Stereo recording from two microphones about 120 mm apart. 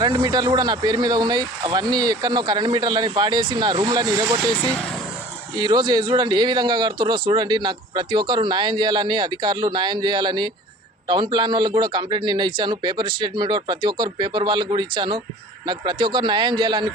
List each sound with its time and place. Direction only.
0.2 s speech: 30° right (ahead or behind)
4.7 s speech: 5° left (ahead or behind)
5.5 s speech: 35° right (ahead or behind)